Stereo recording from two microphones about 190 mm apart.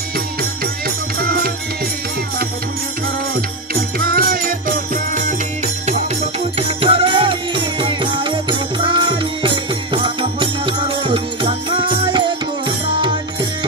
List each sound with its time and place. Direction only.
1.2 s music: 50° right (ahead or behind)
3.3 s music: 50° right (ahead or behind)
6.8 s music: 30° right (ahead or behind)